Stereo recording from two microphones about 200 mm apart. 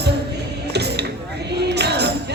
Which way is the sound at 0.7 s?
55° right (ahead or behind).